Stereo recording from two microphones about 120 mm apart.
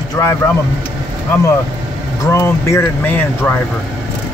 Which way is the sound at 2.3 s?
25° left (ahead or behind).